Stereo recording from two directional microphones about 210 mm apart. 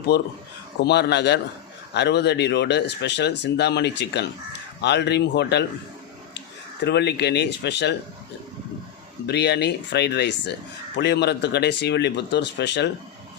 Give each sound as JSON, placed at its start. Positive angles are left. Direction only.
{"t": 0.1, "sound": "speech", "side_deg": 50}
{"t": 6.8, "sound": "speech", "side_deg": 55}
{"t": 9.2, "sound": "speech", "side_deg": 50}